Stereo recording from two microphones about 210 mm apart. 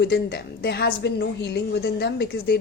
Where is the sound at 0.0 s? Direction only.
50° left (ahead or behind).